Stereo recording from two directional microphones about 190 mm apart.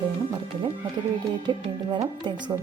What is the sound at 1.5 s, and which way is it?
Speech, 20° right (ahead or behind).